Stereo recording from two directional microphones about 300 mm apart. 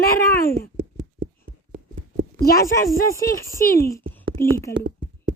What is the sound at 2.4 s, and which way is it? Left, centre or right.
Speech, left.